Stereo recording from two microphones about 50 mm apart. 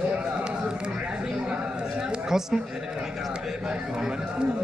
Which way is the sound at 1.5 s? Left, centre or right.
Centre.